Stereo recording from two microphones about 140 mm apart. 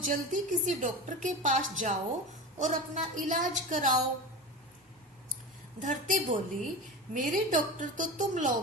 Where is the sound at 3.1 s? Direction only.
65° right (ahead or behind).